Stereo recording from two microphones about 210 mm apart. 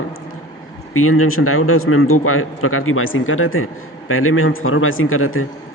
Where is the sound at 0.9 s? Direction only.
90° left.